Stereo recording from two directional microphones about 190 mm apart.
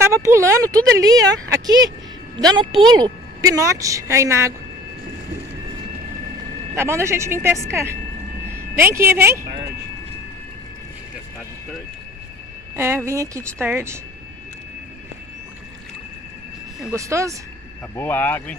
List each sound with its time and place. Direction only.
0.0 s a woman's voice: 15° right (ahead or behind)
6.7 s a woman's voice: 15° right (ahead or behind)
12.7 s a woman's voice: 15° right (ahead or behind)
16.9 s a woman's voice: 15° right (ahead or behind)
17.9 s speech: 10° left (ahead or behind)